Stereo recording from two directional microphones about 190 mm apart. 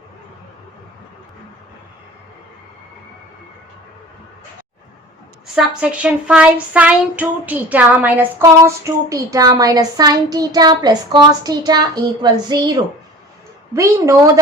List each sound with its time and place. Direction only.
5.5 s a woman's voice: 5° right (ahead or behind); by 12.7 s 20° right (ahead or behind)
13.7 s speech: 15° right (ahead or behind)